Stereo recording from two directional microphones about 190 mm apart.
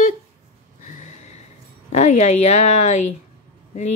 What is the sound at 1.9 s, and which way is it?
Speech, 35° left (ahead or behind).